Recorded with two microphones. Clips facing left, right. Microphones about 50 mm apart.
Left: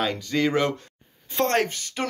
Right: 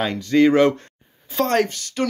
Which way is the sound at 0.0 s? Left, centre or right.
Centre.